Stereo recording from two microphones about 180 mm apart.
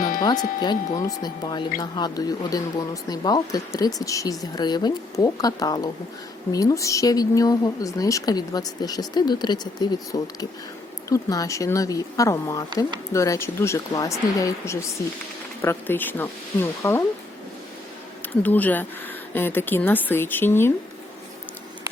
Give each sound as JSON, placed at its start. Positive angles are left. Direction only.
{"t": 0.2, "sound": "speech", "side_deg": 20}
{"t": 18.4, "sound": "speech", "side_deg": 10}